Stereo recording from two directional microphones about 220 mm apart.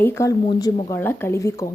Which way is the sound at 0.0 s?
10° left (ahead or behind).